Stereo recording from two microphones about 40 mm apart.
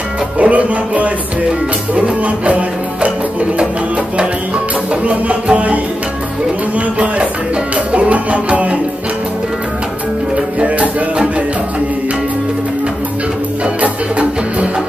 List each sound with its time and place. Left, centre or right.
0.4 s music: right
5.0 s music: right
7.7 s music: right
10.3 s music: right